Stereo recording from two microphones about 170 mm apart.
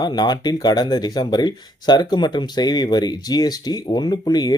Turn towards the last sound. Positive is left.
turn(degrees=25)  # may be behind; listen again after turning